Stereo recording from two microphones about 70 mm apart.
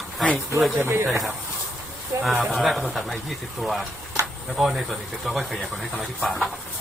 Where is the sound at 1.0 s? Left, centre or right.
Centre.